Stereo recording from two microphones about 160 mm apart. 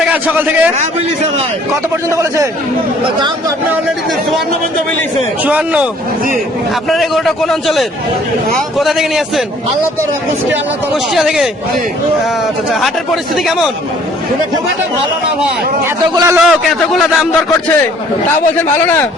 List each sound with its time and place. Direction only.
0.1 s a man's voice: 10° right (ahead or behind)
2.0 s a man's voice: 20° right (ahead or behind)
5.5 s a man's voice: 10° right (ahead or behind)
11.1 s a man's voice: centre (ahead or behind)
16.1 s a man's voice: 20° right (ahead or behind)
16.4 s a man's voice: centre (ahead or behind)